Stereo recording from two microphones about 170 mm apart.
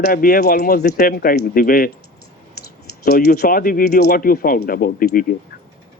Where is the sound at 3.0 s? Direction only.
65° left (ahead or behind).